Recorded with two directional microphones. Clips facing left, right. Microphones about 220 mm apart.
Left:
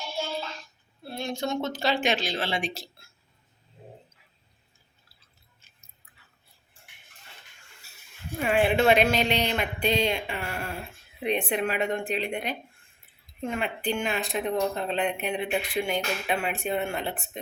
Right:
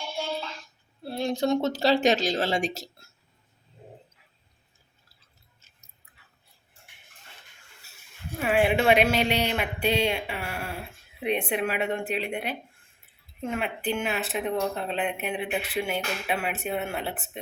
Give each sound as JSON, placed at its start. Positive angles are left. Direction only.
{"t": 1.0, "sound": "a woman's voice", "side_deg": -35}
{"t": 8.4, "sound": "speech", "side_deg": -5}